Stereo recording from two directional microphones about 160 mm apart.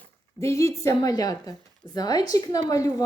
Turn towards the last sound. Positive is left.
turn(degrees=20)  # may be behind; listen again after turning